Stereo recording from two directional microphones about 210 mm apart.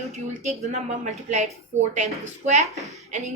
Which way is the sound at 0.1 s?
30° right (ahead or behind).